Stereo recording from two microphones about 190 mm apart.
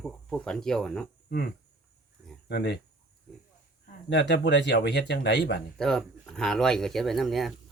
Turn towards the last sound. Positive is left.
turn(degrees=0)  # may be behind; listen again after turning